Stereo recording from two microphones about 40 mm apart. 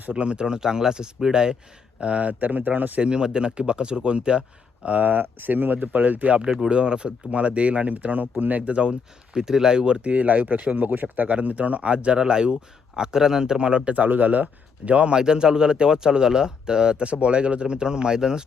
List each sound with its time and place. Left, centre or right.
0.1 s speech: right
2.0 s speech: right
3.0 s speech: right
5.2 s speech: right
6.7 s speech: right
13.9 s speech: right
15.1 s speech: right